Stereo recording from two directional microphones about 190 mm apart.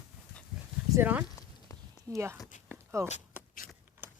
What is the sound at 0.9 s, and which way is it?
Speech, 10° right (ahead or behind).